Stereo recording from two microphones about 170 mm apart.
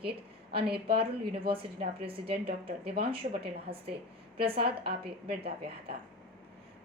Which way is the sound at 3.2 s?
45° right (ahead or behind).